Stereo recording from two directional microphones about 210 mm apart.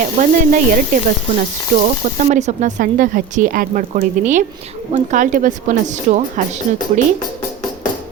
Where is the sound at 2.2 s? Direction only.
35° right (ahead or behind).